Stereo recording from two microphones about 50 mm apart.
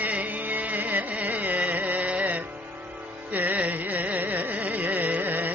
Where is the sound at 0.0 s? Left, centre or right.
Right.